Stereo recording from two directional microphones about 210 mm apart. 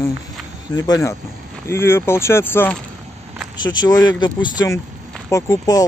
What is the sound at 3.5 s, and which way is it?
Speech, 20° left (ahead or behind).